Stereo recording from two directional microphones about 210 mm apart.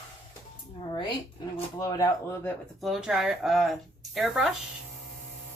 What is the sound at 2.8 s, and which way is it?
Speech, centre (ahead or behind).